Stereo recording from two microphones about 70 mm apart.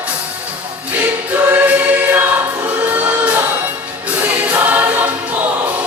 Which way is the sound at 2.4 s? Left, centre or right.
Right.